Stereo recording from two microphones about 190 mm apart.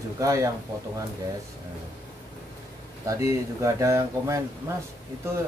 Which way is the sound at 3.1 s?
15° right (ahead or behind).